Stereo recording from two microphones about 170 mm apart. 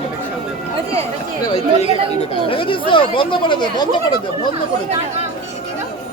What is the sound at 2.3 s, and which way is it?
Speech, 30° left (ahead or behind).